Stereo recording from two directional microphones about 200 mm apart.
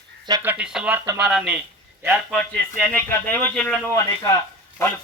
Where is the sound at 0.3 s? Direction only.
20° right (ahead or behind).